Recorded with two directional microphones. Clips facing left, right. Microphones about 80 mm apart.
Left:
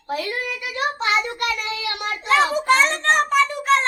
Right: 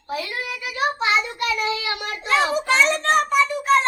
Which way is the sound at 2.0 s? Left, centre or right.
Left.